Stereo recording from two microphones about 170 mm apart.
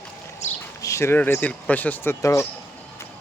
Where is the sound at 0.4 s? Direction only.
45° left (ahead or behind).